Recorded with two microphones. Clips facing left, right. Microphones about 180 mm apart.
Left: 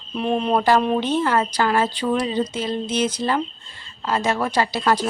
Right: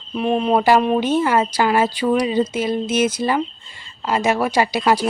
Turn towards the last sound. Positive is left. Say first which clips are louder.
# right 3 dB
turn(degrees=-10)  # may be behind; listen again after turning